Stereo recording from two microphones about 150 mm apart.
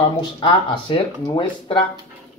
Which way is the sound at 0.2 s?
35° left (ahead or behind).